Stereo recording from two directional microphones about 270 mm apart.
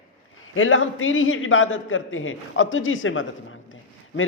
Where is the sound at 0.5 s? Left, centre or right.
Left.